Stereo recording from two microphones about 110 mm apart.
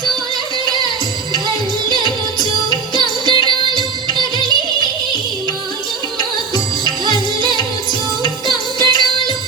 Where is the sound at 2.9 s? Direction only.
40° right (ahead or behind).